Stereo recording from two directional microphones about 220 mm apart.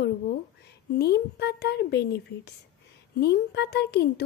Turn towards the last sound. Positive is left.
turn(degrees=45)  # may be behind; listen again after turning